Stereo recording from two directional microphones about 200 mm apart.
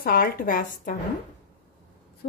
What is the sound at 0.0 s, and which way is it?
Speech, 45° left (ahead or behind).